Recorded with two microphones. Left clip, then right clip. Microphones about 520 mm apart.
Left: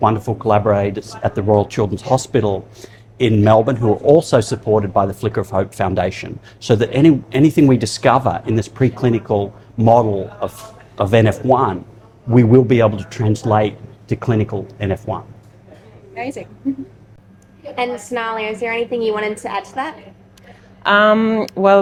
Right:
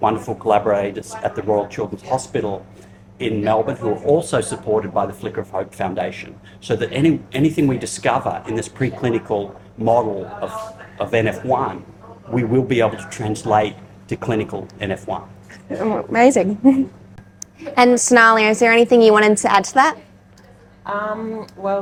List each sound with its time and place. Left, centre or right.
0.0 s speech: left
16.1 s a woman's voice: right
17.7 s a woman's voice: right
20.9 s speech: left